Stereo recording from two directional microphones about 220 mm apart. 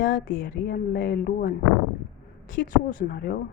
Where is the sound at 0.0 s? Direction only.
45° left (ahead or behind).